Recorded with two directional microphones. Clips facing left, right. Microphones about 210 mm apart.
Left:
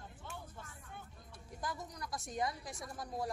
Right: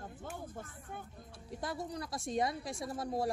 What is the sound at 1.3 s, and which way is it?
A woman's voice, 30° right (ahead or behind).